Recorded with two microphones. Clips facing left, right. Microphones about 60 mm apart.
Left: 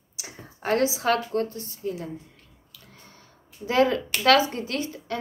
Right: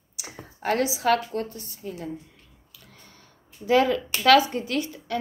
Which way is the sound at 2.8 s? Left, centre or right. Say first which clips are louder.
Left 1 dB; left.